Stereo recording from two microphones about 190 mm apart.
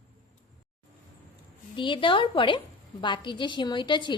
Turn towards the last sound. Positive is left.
turn(degrees=25)  # may be behind; listen again after turning